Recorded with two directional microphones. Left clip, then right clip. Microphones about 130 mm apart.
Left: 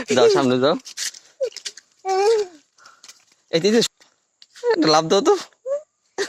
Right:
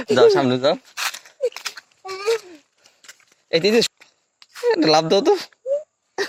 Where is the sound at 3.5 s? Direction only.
15° left (ahead or behind).